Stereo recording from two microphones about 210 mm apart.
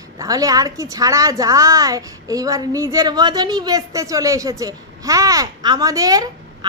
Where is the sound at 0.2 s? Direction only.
15° right (ahead or behind).